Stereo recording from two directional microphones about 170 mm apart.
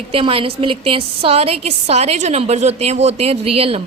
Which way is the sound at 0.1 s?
35° right (ahead or behind).